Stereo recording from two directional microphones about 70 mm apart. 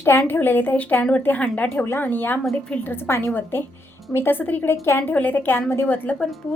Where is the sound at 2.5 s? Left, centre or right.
Centre.